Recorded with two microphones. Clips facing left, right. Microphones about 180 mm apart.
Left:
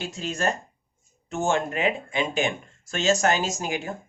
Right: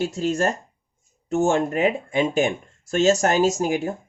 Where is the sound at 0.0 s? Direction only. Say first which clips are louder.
Right 6 dB; 45° right (ahead or behind).